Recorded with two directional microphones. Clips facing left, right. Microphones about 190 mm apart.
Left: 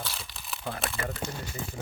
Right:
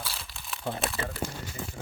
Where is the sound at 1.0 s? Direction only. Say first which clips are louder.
Left 1 dB; 25° right (ahead or behind).